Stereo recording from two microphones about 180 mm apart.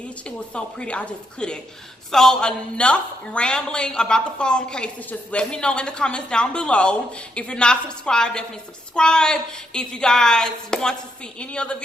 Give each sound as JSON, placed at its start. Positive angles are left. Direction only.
{"t": 0.3, "sound": "a woman's voice", "side_deg": 5}